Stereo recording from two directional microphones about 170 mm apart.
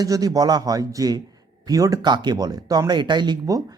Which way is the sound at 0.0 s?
20° right (ahead or behind).